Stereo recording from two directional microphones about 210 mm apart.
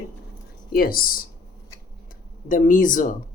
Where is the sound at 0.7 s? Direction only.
45° left (ahead or behind).